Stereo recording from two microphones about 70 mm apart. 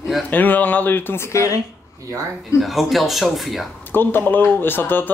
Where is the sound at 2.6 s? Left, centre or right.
Centre.